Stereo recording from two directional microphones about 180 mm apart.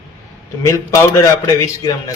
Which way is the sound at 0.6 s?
15° left (ahead or behind).